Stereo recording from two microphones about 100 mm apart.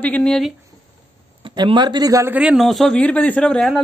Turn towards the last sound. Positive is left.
turn(degrees=5)  # may be behind; listen again after turning